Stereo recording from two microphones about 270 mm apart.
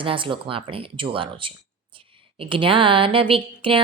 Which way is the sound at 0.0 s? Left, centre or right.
Centre.